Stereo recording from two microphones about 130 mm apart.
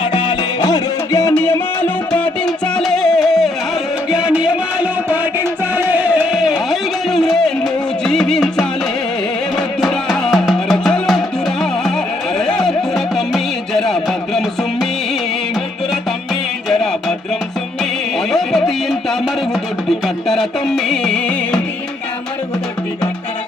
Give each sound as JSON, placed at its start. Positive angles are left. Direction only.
{"t": 0.0, "sound": "music", "side_deg": 40}
{"t": 1.3, "sound": "music", "side_deg": 15}
{"t": 4.1, "sound": "music", "side_deg": -10}
{"t": 16.6, "sound": "music", "side_deg": 5}
{"t": 18.3, "sound": "music", "side_deg": 0}